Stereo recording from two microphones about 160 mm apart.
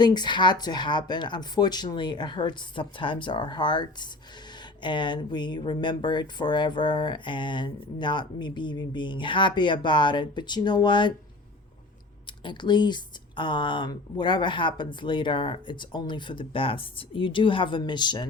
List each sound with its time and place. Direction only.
0.0 s speech: 25° left (ahead or behind)
12.5 s speech: 30° left (ahead or behind)